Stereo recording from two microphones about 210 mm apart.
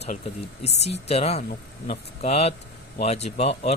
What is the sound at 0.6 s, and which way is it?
Speech, 30° left (ahead or behind).